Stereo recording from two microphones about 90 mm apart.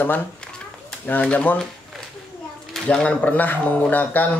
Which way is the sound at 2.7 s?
10° left (ahead or behind).